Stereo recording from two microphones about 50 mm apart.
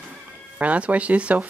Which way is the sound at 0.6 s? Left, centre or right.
Right.